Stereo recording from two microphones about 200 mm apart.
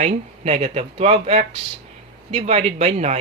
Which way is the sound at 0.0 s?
30° right (ahead or behind).